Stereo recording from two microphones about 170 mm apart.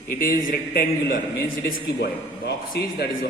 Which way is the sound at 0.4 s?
65° left (ahead or behind).